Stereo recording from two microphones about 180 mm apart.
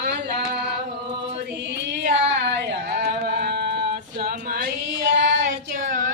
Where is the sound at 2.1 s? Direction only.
70° right (ahead or behind); by 4.7 s 55° right (ahead or behind).